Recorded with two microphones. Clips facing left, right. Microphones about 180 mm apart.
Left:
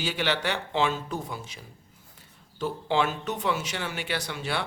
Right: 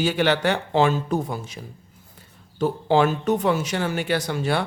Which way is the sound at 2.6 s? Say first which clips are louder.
Right 7 dB; 45° right (ahead or behind).